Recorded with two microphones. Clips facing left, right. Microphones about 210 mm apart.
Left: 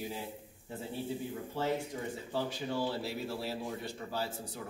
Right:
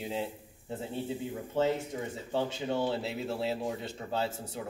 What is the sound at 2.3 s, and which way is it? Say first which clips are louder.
Speech: right 5 dB; 25° right (ahead or behind).